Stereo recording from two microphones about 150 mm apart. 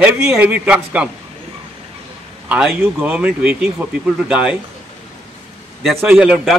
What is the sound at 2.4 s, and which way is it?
A man's voice, 5° right (ahead or behind).